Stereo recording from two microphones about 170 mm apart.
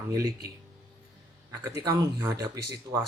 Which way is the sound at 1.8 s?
20° right (ahead or behind).